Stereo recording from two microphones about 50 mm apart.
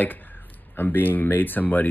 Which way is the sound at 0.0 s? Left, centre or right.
Left.